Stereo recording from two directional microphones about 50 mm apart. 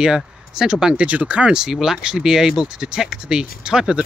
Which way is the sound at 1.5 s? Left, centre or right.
Centre.